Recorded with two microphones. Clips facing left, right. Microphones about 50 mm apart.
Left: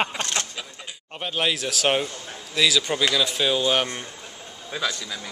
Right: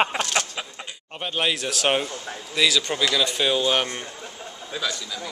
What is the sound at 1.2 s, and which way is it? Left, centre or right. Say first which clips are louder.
A man's voice: even; centre.